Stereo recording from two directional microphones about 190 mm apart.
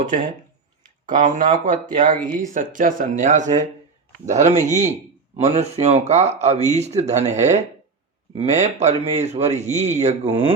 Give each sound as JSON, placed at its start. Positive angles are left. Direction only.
{"t": 1.0, "sound": "speech", "side_deg": -45}